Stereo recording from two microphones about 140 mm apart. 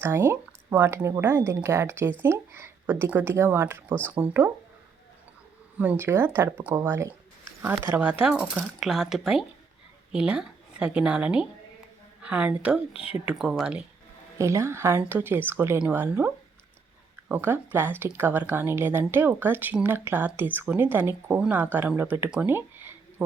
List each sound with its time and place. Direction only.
0.0 s speech: 20° right (ahead or behind)
5.7 s speech: 10° right (ahead or behind)
14.3 s speech: 20° right (ahead or behind)